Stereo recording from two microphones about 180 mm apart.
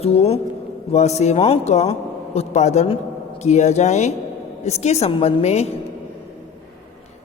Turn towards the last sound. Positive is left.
turn(degrees=35)  # may be behind; listen again after turning